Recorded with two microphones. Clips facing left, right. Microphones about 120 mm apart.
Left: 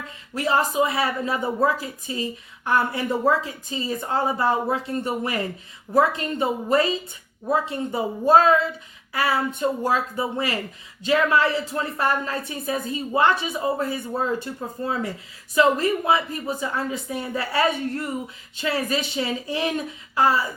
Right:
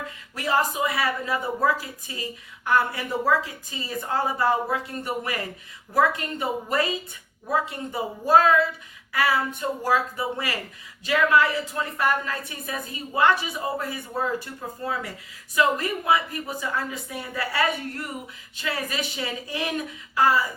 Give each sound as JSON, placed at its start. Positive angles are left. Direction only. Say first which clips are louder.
{"t": 0.3, "sound": "a woman's voice", "louder": "left 3 dB", "side_deg": 25}